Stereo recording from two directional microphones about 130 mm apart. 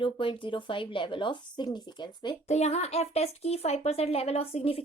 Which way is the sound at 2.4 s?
55° left (ahead or behind).